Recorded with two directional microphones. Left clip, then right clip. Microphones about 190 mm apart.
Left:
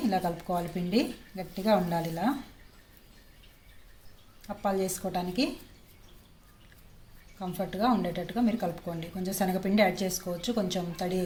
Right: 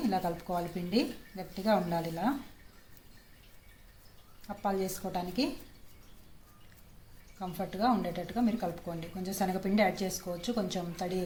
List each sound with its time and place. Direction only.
0.1 s speech: 15° left (ahead or behind)
4.4 s a woman's voice: 20° left (ahead or behind)
7.3 s speech: 15° left (ahead or behind)